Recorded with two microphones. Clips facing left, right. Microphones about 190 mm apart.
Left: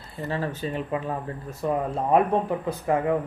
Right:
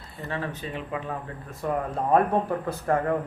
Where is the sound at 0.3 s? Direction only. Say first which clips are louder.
Left 3 dB; 35° left (ahead or behind).